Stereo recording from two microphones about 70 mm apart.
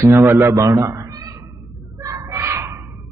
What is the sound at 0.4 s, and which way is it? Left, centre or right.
Cat, right.